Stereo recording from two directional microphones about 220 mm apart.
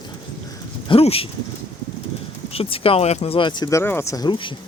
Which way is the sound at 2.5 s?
25° left (ahead or behind).